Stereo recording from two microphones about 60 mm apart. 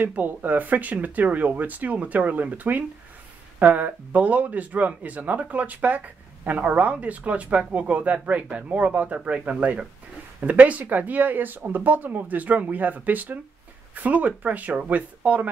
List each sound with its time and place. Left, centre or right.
0.0 s speech: right